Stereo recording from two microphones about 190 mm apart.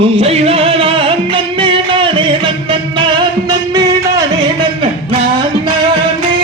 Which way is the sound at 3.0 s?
25° right (ahead or behind).